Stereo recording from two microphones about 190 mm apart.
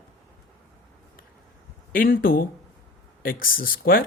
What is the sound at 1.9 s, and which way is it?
Speech, 50° left (ahead or behind).